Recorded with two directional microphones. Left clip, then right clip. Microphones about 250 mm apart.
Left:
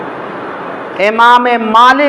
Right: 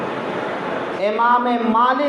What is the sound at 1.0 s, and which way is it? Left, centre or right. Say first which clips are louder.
A man's voice: left 10 dB; left.